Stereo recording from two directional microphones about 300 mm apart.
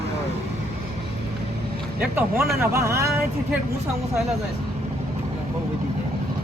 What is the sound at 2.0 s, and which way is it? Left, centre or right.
Speech, centre.